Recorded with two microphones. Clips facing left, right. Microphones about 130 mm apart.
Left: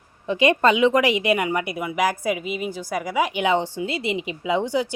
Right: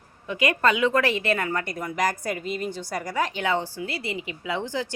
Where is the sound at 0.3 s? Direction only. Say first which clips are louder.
Left 5 dB; 25° left (ahead or behind).